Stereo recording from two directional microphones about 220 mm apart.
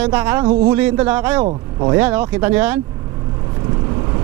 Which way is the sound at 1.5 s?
25° right (ahead or behind).